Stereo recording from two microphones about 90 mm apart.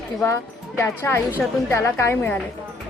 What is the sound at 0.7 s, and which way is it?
A woman's voice, 25° left (ahead or behind).